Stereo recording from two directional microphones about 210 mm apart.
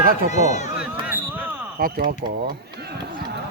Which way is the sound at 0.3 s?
35° left (ahead or behind).